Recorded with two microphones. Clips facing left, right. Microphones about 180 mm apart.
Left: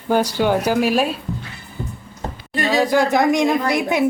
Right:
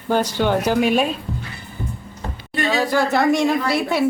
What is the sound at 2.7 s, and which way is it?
Speech, 15° left (ahead or behind).